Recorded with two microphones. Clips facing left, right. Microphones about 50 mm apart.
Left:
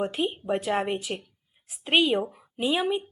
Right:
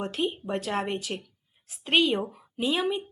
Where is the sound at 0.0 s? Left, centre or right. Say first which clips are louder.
Left 2 dB; centre.